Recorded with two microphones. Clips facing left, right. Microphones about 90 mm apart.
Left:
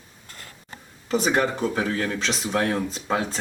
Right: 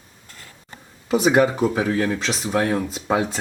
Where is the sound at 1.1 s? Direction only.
5° right (ahead or behind).